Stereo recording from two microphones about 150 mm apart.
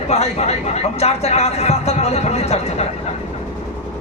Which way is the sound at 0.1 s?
45° left (ahead or behind).